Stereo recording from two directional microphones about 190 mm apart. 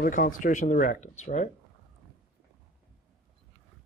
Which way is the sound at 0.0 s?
50° left (ahead or behind).